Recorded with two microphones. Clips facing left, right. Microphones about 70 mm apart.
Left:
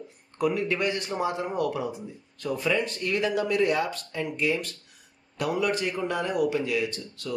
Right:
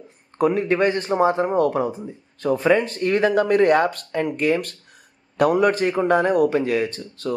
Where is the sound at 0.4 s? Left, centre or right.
Right.